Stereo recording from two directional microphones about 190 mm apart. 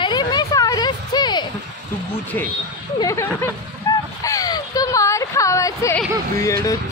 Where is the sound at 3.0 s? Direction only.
15° left (ahead or behind).